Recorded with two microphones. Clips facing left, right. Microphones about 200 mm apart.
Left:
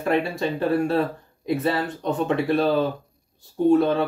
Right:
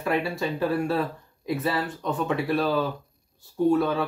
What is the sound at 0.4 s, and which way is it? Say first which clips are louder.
Speech: left 3 dB; 25° left (ahead or behind).